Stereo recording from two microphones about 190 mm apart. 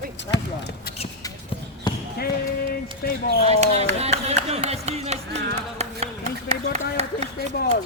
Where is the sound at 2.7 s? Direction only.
50° left (ahead or behind).